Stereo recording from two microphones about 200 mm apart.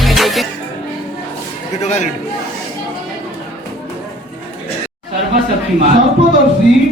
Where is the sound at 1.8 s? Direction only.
35° left (ahead or behind).